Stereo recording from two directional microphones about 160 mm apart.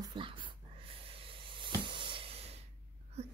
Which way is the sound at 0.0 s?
30° right (ahead or behind).